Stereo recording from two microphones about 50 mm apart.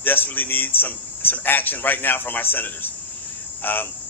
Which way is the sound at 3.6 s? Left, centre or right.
Left.